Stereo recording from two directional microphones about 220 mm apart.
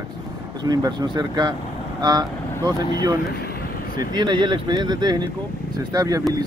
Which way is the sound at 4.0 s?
20° right (ahead or behind).